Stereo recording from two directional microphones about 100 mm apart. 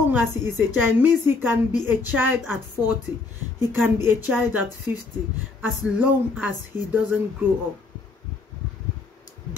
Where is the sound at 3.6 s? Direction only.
25° right (ahead or behind).